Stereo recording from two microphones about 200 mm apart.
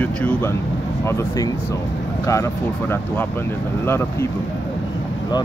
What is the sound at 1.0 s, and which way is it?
Speech, 15° left (ahead or behind).